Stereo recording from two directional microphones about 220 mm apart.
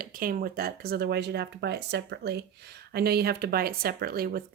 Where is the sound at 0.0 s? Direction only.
40° right (ahead or behind).